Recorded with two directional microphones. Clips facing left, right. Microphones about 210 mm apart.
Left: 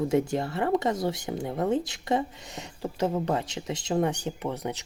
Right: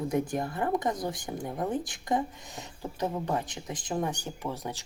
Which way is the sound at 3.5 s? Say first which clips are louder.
Left 5 dB; 25° left (ahead or behind).